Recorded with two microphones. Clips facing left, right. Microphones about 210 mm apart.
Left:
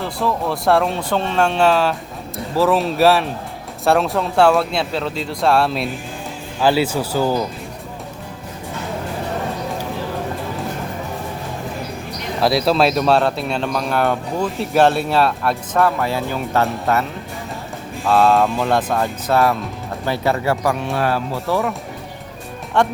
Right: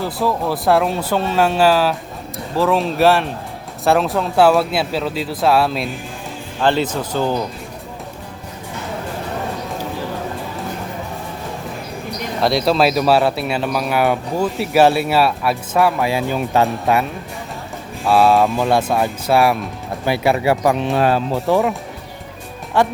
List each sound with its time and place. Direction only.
0.0 s speech: centre (ahead or behind)
12.4 s speech: centre (ahead or behind); by 21.8 s 15° right (ahead or behind)
22.8 s speech: 5° right (ahead or behind)